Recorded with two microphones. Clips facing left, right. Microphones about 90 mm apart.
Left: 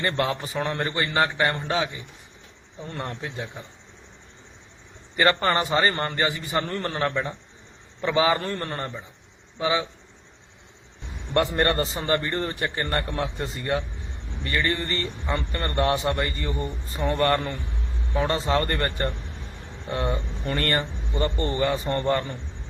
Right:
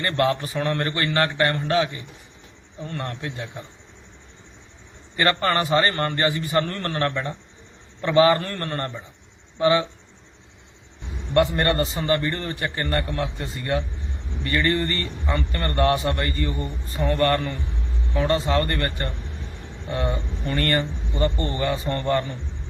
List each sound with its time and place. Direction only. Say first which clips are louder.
0.0 s a man's voice: right 3 dB; 20° left (ahead or behind)
3.2 s a man's voice: right 1 dB; 10° left (ahead or behind)
5.1 s a man's voice: even; 25° left (ahead or behind)
11.3 s a man's voice: right 2 dB; 30° left (ahead or behind)
19.9 s a man's voice: right 1 dB; 25° left (ahead or behind)